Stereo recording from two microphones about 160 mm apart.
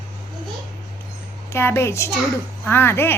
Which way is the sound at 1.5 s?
15° left (ahead or behind).